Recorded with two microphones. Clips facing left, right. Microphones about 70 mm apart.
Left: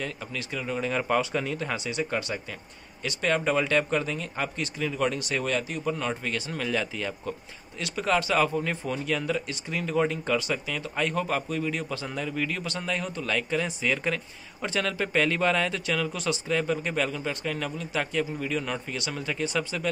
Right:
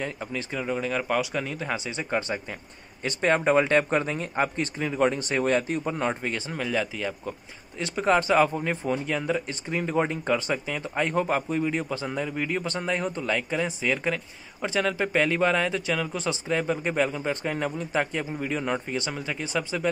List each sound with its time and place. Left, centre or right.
0.0 s speech: right
0.7 s a man's voice: centre
1.9 s speech: right
6.5 s a man's voice: centre
7.8 s a man's voice: right
13.2 s a man's voice: centre